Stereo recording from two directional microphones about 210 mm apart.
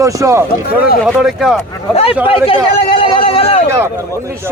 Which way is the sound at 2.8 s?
25° left (ahead or behind).